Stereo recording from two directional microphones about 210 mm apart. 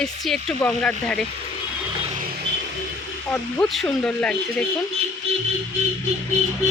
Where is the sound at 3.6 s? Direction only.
Centre (ahead or behind).